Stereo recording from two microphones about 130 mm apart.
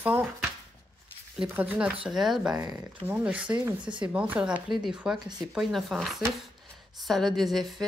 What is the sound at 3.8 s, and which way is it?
Speech, 35° right (ahead or behind).